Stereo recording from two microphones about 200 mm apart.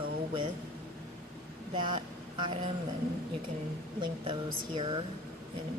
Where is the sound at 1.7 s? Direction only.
25° right (ahead or behind).